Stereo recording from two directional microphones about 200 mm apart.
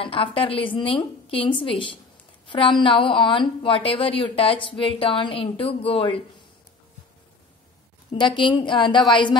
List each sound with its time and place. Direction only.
0.0 s a woman's voice: 25° left (ahead or behind)
8.1 s a woman's voice: 25° left (ahead or behind)